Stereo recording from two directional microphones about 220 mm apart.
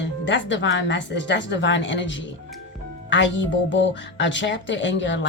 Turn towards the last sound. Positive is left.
turn(degrees=55)  # may be behind; listen again after turning